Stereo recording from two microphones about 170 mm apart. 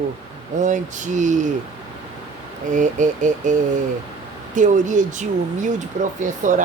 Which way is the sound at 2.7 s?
50° right (ahead or behind).